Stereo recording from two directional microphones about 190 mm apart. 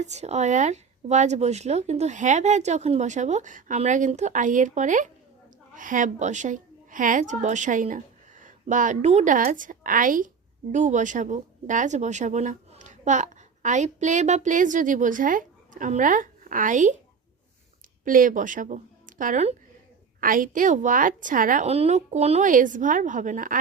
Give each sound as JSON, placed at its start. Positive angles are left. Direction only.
{"t": 0.0, "sound": "a woman's voice", "side_deg": -35}
{"t": 18.0, "sound": "a woman's voice", "side_deg": -45}